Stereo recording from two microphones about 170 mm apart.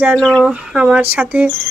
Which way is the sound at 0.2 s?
5° left (ahead or behind).